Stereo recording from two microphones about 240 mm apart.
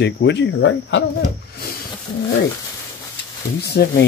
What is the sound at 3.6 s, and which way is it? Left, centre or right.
Speech, left.